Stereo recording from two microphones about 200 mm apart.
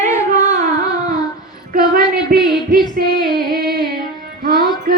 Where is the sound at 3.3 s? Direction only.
50° right (ahead or behind).